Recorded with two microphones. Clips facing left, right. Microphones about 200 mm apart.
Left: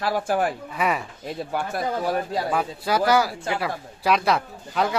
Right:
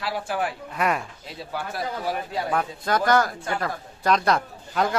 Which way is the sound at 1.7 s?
40° left (ahead or behind).